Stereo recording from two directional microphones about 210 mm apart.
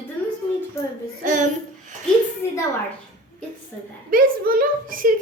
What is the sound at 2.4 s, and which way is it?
Speech, 10° left (ahead or behind).